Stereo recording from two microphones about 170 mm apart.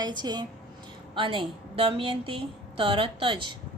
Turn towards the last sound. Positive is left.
turn(degrees=-30)  # may be behind; listen again after turning